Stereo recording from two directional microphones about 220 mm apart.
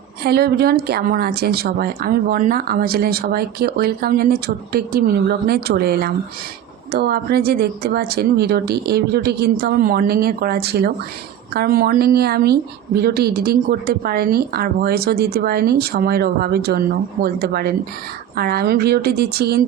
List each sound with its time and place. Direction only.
0.2 s a woman's voice: 45° right (ahead or behind)